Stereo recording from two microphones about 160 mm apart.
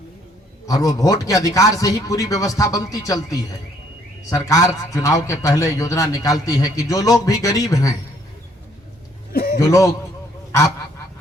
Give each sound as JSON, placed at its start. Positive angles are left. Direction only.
{"t": 0.7, "sound": "a man's voice", "side_deg": 20}
{"t": 9.3, "sound": "a sound", "side_deg": 75}
{"t": 9.6, "sound": "a man's voice", "side_deg": 20}